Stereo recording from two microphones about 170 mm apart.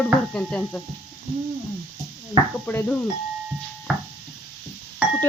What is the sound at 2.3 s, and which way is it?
Speech, 35° right (ahead or behind).